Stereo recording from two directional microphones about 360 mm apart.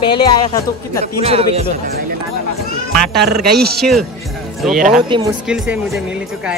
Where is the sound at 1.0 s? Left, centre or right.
Centre.